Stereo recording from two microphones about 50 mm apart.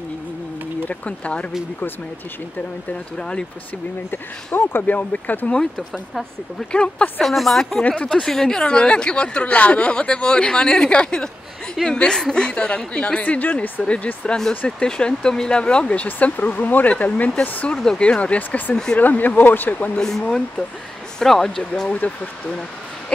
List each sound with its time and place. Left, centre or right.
0.8 s a woman's voice: left
3.2 s a woman's voice: centre
4.5 s speech: left
4.8 s speech: left
5.5 s a woman's voice: centre
7.2 s speech: centre
7.9 s a woman's voice: left
8.2 s a woman's voice: centre; by 17.7 s left
17.8 s a woman's voice: centre; by 19.9 s left
20.0 s speech: centre
21.9 s speech: left